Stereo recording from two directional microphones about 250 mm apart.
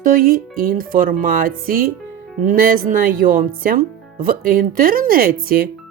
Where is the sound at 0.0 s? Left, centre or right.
Right.